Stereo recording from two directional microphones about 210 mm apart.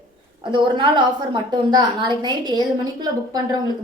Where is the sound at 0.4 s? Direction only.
20° right (ahead or behind).